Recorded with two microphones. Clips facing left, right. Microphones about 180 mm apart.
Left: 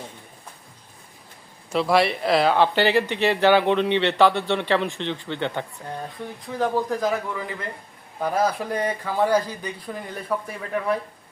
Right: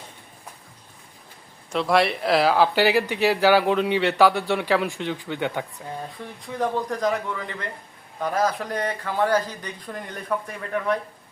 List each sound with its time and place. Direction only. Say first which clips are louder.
1.7 s speech: left 1 dB; centre (ahead or behind)